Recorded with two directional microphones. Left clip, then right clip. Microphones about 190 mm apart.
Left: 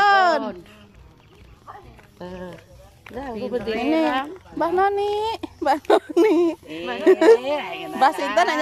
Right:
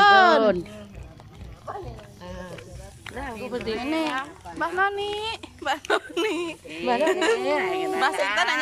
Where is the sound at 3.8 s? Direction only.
20° left (ahead or behind).